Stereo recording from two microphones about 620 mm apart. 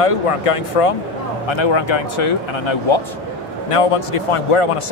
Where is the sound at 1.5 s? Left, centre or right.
Left.